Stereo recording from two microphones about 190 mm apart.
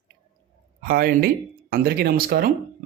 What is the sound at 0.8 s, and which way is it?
Speech, 50° right (ahead or behind).